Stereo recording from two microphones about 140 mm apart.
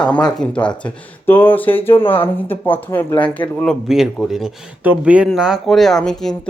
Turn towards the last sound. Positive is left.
turn(degrees=5)  # may be behind; listen again after turning